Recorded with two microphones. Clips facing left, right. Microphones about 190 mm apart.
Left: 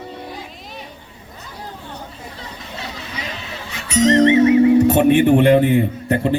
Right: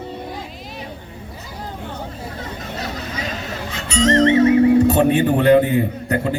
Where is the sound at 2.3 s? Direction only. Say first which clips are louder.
Right 4 dB; 40° right (ahead or behind).